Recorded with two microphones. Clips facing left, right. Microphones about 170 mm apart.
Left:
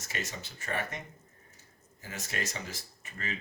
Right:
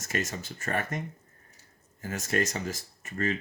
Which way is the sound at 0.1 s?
45° right (ahead or behind).